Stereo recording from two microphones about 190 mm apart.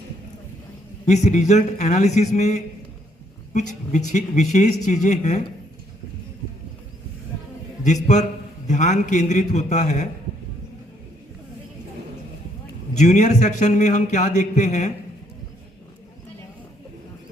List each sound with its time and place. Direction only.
1.0 s a man's voice: 40° left (ahead or behind)
8.0 s a man's voice: 40° left (ahead or behind)
12.9 s a man's voice: 40° left (ahead or behind)